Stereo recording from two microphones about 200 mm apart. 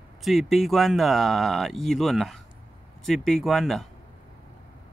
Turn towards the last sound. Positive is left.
turn(degrees=0)  # may be behind; listen again after turning